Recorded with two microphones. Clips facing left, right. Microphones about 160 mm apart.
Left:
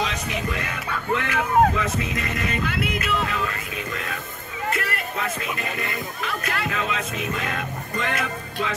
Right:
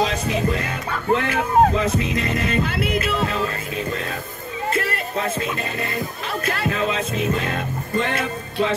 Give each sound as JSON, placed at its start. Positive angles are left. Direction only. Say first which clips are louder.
{"t": 0.0, "sound": "speech", "louder": "right 6 dB", "side_deg": -35}
{"t": 2.0, "sound": "music", "louder": "right 5 dB", "side_deg": -30}
{"t": 4.6, "sound": "speech", "louder": "right 3 dB", "side_deg": -25}